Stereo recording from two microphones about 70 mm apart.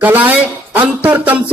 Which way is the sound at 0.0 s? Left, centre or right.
Right.